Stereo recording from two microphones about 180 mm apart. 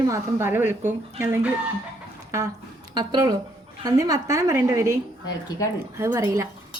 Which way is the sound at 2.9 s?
20° right (ahead or behind).